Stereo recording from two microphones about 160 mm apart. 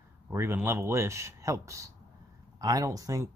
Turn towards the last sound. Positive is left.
turn(degrees=-20)  # may be behind; listen again after turning